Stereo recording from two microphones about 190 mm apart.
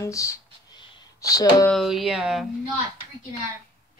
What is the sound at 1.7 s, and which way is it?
Speech, centre (ahead or behind).